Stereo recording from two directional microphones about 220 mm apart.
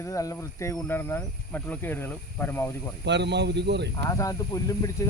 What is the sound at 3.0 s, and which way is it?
Speech, 50° right (ahead or behind).